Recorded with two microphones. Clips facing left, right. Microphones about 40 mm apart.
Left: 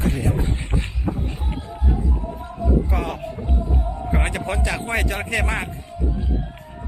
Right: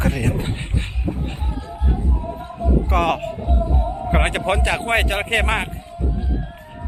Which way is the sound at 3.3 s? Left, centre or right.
Right.